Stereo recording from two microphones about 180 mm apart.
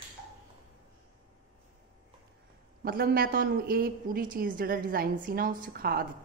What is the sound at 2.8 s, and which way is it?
Speech, 55° right (ahead or behind).